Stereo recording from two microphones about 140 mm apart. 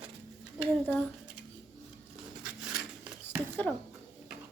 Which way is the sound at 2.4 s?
10° right (ahead or behind).